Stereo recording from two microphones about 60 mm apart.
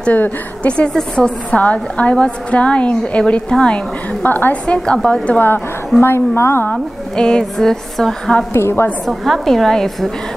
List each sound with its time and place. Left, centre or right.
0.0 s a woman's voice: left
4.2 s a woman's voice: left
4.6 s speech: centre
5.9 s a woman's voice: left
6.7 s speech: centre
8.5 s a woman's voice: left
9.0 s a woman's voice: centre